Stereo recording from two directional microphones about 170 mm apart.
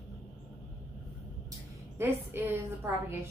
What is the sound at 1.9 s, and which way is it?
Speech, 15° right (ahead or behind).